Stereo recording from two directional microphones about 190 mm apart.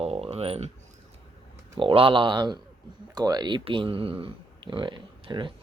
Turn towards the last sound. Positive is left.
turn(degrees=-25)  # may be behind; listen again after turning